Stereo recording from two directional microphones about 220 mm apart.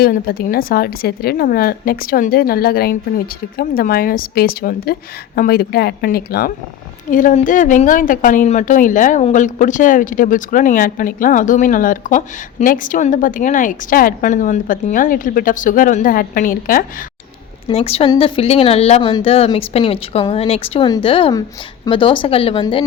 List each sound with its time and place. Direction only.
0.0 s a woman's voice: 45° left (ahead or behind)
17.7 s a woman's voice: 25° left (ahead or behind)